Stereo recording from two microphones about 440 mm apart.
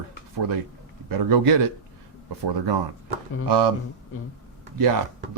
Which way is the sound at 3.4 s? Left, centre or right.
Right.